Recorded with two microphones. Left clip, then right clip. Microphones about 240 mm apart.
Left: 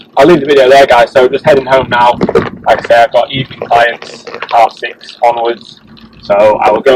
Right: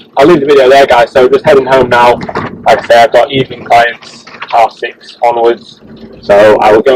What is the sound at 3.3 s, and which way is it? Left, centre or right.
Speech, centre.